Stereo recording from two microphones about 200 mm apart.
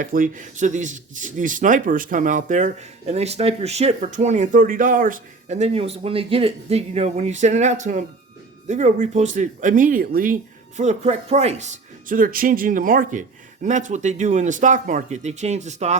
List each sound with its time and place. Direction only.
0.0 s speech: 40° right (ahead or behind)